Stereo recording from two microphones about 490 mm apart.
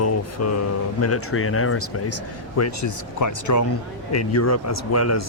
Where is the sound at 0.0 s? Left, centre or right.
Left.